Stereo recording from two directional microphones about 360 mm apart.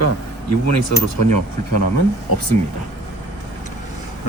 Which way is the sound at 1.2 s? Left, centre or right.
Left.